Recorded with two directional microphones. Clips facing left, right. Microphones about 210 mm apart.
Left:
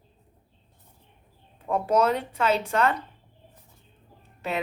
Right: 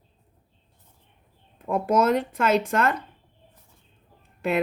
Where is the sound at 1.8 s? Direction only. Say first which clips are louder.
Right 2 dB; 50° right (ahead or behind).